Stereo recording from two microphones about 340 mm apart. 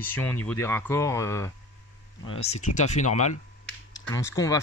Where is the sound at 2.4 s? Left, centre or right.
Centre.